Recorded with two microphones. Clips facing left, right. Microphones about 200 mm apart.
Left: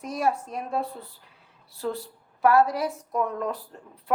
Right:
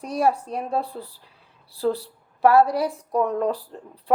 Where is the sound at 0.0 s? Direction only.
35° right (ahead or behind).